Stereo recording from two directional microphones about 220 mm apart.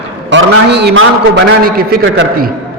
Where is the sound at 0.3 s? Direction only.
55° right (ahead or behind).